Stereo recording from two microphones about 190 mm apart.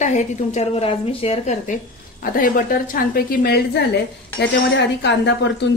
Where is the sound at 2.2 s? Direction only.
45° left (ahead or behind).